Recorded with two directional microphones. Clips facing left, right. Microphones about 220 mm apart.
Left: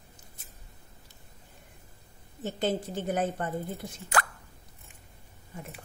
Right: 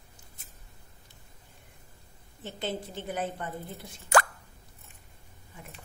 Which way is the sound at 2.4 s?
45° left (ahead or behind).